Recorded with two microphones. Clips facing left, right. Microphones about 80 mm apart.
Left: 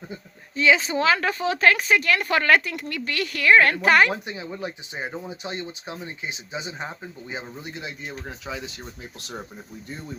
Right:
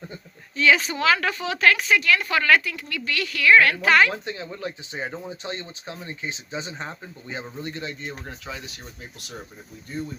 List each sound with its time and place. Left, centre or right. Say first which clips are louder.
0.5 s speech: even; left